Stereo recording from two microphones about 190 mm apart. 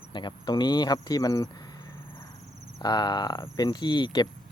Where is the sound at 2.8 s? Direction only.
20° left (ahead or behind).